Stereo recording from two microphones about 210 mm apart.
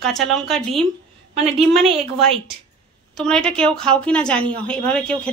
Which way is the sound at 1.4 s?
30° right (ahead or behind).